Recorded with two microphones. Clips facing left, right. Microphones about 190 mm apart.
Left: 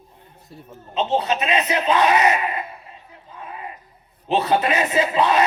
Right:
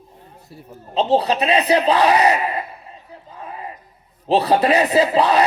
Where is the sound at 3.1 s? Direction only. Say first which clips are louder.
Right 2 dB; 35° right (ahead or behind).